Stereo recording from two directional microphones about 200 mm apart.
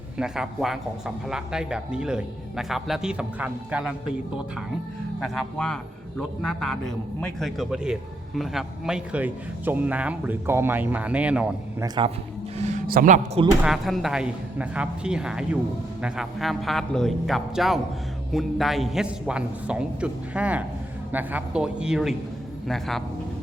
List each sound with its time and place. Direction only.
0.2 s a man's voice: centre (ahead or behind)
5.2 s a man's voice: centre (ahead or behind)
11.8 s a man's voice: 25° right (ahead or behind)
12.5 s a sound: 35° right (ahead or behind)
13.7 s a man's voice: centre (ahead or behind)